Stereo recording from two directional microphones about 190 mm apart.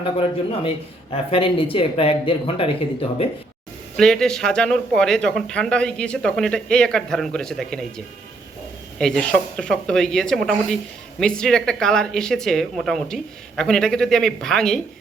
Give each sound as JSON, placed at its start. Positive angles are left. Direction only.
{"t": 0.0, "sound": "speech", "side_deg": 30}
{"t": 3.9, "sound": "speech", "side_deg": 0}